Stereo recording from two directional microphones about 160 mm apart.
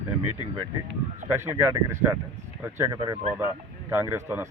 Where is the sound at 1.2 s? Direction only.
15° right (ahead or behind).